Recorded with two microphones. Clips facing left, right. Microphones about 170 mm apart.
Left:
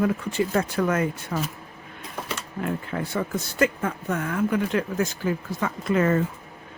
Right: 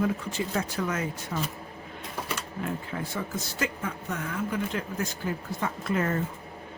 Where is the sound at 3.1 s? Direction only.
55° left (ahead or behind); by 6.2 s 90° left.